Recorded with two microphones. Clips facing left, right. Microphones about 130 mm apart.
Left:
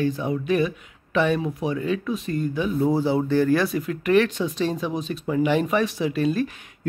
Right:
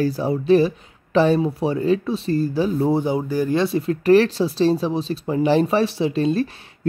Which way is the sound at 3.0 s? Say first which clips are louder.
Left 1 dB; 15° right (ahead or behind).